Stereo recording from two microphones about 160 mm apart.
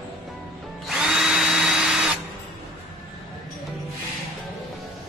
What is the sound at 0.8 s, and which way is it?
Drill, centre (ahead or behind).